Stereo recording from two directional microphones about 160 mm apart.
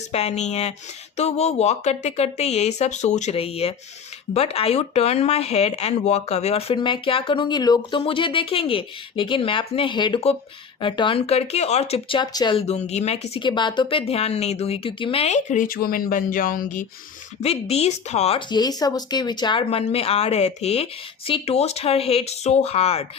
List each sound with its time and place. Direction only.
0.1 s a woman's voice: 40° left (ahead or behind); by 12.5 s 25° left (ahead or behind)
12.5 s a woman's voice: 40° left (ahead or behind)
17.4 s speech: 40° left (ahead or behind)